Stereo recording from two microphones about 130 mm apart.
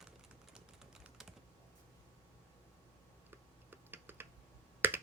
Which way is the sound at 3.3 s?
15° right (ahead or behind).